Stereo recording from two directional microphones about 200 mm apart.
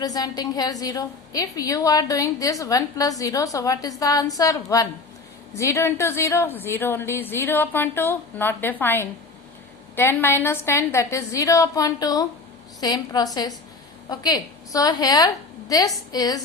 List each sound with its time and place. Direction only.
0.0 s a woman's voice: 20° left (ahead or behind)